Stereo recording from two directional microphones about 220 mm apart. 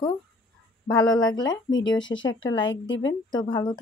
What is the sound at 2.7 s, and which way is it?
Speech, 60° left (ahead or behind).